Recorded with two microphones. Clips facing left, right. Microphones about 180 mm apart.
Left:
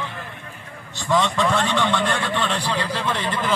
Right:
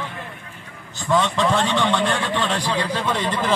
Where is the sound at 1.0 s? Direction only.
10° right (ahead or behind).